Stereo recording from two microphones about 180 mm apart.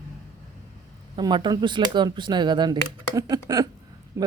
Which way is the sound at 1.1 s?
25° right (ahead or behind).